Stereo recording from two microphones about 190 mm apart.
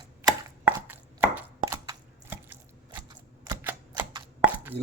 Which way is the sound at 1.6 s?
15° right (ahead or behind).